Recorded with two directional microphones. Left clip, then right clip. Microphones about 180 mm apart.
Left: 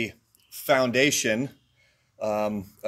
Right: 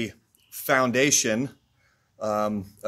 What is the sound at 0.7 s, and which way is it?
Speech, 5° right (ahead or behind).